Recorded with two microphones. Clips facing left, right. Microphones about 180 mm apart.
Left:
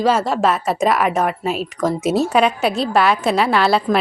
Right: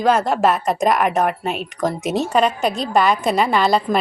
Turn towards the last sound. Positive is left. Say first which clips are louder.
# left 1 dB
turn(degrees=5)  # may be behind; listen again after turning